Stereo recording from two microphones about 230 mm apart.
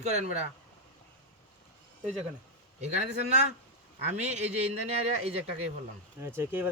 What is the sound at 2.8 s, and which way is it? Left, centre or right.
Speech, right.